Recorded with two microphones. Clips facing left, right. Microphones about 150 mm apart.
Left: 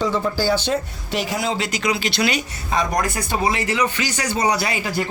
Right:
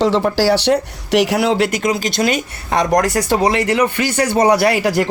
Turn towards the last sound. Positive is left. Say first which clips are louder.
# right 9 dB
turn(degrees=-75)  # may be behind; listen again after turning